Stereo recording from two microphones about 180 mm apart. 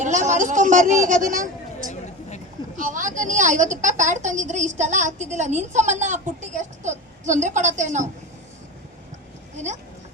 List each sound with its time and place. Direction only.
0.0 s a woman's voice: 45° right (ahead or behind)